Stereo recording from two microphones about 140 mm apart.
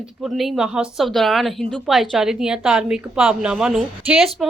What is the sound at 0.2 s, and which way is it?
A woman's voice, centre (ahead or behind).